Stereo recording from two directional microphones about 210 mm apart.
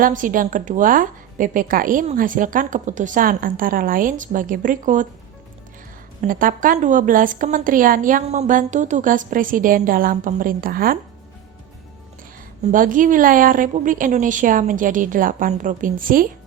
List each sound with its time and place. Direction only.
0.0 s a woman's voice: 40° right (ahead or behind)
6.2 s a woman's voice: 40° right (ahead or behind)
12.7 s a woman's voice: 40° right (ahead or behind)